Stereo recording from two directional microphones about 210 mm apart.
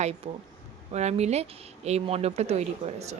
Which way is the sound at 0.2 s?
30° right (ahead or behind).